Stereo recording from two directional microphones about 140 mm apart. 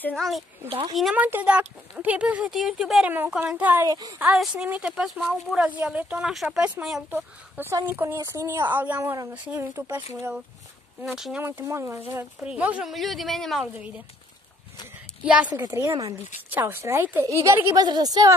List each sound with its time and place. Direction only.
0.0 s speech: 5° left (ahead or behind)
0.7 s speech: 40° right (ahead or behind)
0.9 s speech: centre (ahead or behind)
3.8 s speech: 25° right (ahead or behind)
4.2 s speech: 5° right (ahead or behind)
11.0 s speech: 5° right (ahead or behind)
11.4 s speech: 20° right (ahead or behind)
12.4 s speech: 10° right (ahead or behind)
13.7 s speech: 10° right (ahead or behind)
15.2 s speech: 10° right (ahead or behind)
15.5 s speech: 20° right (ahead or behind)